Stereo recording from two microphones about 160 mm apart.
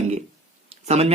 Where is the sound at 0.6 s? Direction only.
40° right (ahead or behind).